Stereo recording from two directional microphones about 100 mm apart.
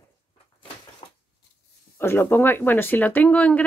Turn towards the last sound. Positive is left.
turn(degrees=15)  # may be behind; listen again after turning